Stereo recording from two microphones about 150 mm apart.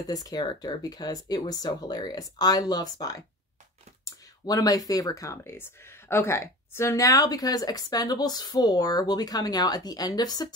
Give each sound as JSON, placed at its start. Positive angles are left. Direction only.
{"t": 0.1, "sound": "speech", "side_deg": 25}